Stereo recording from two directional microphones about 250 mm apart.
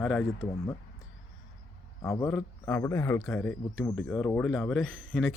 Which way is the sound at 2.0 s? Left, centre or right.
Centre.